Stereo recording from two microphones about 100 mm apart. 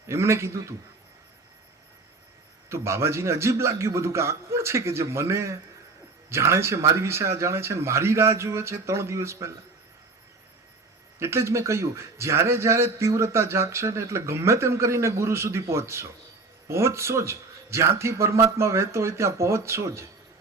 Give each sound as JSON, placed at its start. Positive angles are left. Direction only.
{"t": 0.1, "sound": "a man's voice", "side_deg": -25}
{"t": 2.6, "sound": "a man's voice", "side_deg": -25}
{"t": 11.2, "sound": "a man's voice", "side_deg": -25}